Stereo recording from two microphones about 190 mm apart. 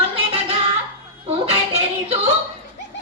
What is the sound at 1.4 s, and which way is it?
Music, 30° right (ahead or behind).